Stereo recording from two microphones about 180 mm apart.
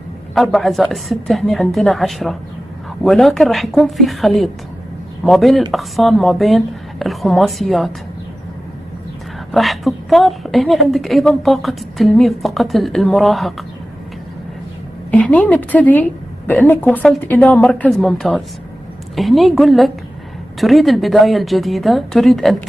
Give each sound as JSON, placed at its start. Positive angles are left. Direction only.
{"t": 0.3, "sound": "a woman's voice", "side_deg": 0}
{"t": 9.5, "sound": "a woman's voice", "side_deg": 0}
{"t": 15.0, "sound": "a woman's voice", "side_deg": 5}